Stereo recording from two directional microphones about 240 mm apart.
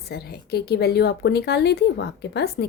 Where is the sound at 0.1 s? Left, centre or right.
Left.